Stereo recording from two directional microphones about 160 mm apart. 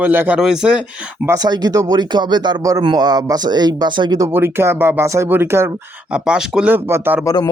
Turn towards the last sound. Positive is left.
turn(degrees=20)  # may be behind; listen again after turning